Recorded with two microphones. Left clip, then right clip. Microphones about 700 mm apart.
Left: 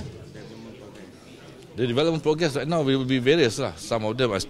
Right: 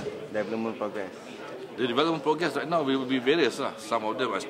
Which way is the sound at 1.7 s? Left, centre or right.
Left.